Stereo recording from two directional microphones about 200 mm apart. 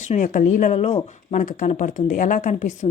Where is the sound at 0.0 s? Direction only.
40° left (ahead or behind).